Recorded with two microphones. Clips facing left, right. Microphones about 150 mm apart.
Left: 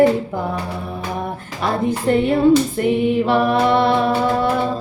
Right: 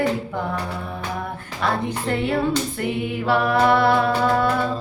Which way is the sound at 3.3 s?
20° left (ahead or behind).